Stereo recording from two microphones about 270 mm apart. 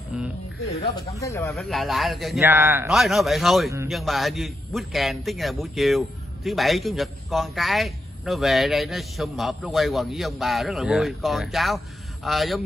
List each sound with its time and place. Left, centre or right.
0.1 s a sound: centre
1.2 s speech: centre
1.5 s a man's voice: centre